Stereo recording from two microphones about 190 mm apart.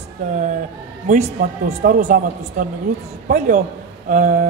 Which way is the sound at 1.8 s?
45° right (ahead or behind).